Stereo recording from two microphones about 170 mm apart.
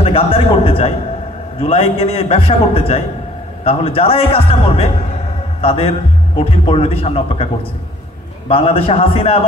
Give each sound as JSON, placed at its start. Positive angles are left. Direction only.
{"t": 0.0, "sound": "a man's voice", "side_deg": 35}
{"t": 8.5, "sound": "a man's voice", "side_deg": 35}